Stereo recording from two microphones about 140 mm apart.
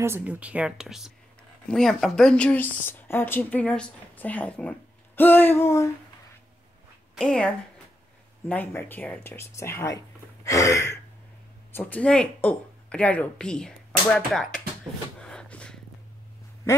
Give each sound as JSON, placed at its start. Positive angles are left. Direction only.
{"t": 0.0, "sound": "speech", "side_deg": -15}
{"t": 7.2, "sound": "speech", "side_deg": 5}
{"t": 15.2, "sound": "a sound", "side_deg": 5}